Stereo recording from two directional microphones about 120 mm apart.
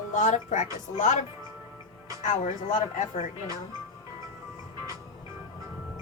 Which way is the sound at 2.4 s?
90° left.